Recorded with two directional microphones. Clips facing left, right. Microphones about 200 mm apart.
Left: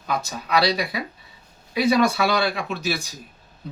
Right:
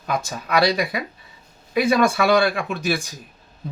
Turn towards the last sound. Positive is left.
turn(degrees=-50)  # may be behind; listen again after turning